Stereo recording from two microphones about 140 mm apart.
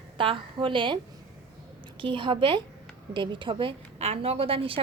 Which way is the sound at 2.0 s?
35° right (ahead or behind).